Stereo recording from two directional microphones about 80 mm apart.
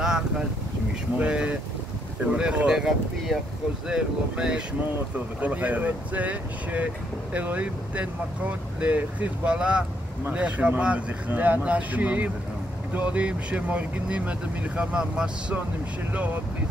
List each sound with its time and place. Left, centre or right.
1.1 s speech: centre